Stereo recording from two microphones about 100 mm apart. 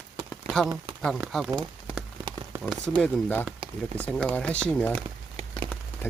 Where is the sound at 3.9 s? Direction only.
10° left (ahead or behind).